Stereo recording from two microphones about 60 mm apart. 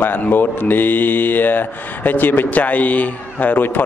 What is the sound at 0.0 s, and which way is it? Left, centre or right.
Speech, left.